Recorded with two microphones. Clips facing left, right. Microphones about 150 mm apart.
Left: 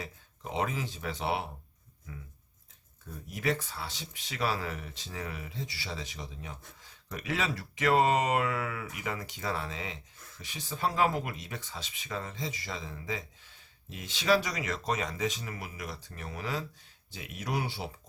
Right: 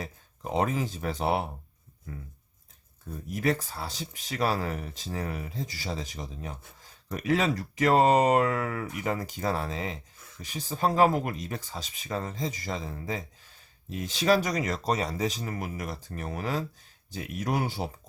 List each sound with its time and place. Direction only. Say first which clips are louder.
0.5 s speech: right 5 dB; 45° right (ahead or behind)
3.2 s speech: right 4 dB; 45° right (ahead or behind)